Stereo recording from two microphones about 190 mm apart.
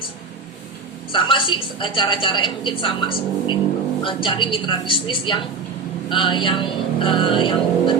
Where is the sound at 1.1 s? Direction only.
25° left (ahead or behind).